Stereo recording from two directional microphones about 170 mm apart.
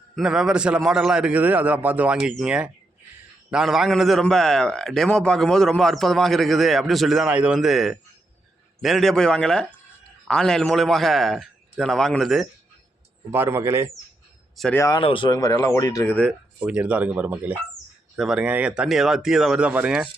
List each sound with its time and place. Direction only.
0.2 s a man's voice: 5° right (ahead or behind)
13.3 s speech: 15° right (ahead or behind)
14.5 s speech: centre (ahead or behind)
14.8 s speech: 20° left (ahead or behind)
16.6 s a man's voice: 5° right (ahead or behind)